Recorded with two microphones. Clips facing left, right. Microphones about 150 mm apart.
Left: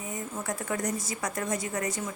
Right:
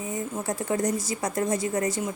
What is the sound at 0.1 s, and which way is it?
A woman's voice, 30° right (ahead or behind).